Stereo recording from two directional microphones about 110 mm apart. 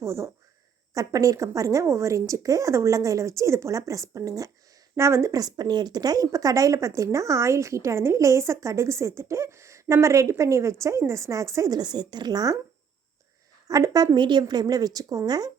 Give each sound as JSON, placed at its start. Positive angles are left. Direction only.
{"t": 0.0, "sound": "a woman's voice", "side_deg": -25}
{"t": 13.7, "sound": "a woman's voice", "side_deg": -30}